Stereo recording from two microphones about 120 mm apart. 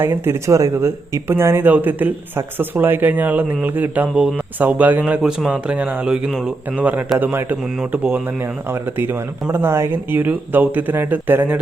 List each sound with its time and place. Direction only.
0.0 s speech: 20° right (ahead or behind)